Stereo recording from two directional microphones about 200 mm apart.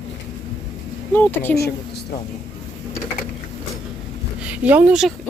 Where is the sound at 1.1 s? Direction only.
10° left (ahead or behind).